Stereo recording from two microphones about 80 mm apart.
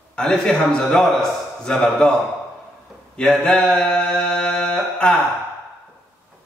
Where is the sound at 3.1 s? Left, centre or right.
Centre.